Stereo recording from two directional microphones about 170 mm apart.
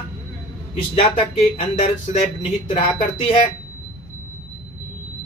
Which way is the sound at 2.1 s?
50° left (ahead or behind).